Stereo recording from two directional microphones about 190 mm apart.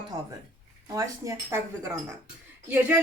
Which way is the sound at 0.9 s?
15° right (ahead or behind).